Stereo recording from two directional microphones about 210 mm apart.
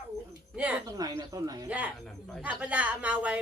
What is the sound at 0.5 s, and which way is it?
Speech, 5° right (ahead or behind).